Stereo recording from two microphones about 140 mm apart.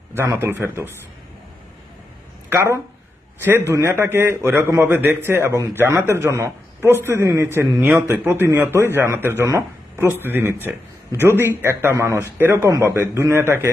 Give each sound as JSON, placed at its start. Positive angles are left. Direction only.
{"t": 0.1, "sound": "speech", "side_deg": -15}
{"t": 2.5, "sound": "speech", "side_deg": -20}